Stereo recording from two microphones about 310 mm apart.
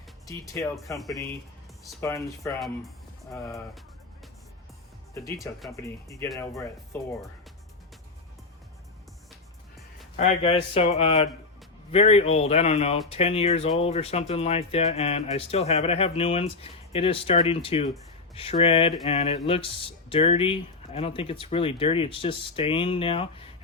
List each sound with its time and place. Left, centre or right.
0.3 s speech: centre
5.4 s speech: centre
10.2 s speech: centre